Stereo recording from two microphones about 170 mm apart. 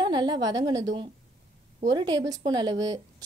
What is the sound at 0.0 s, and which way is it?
A woman's voice, 25° right (ahead or behind).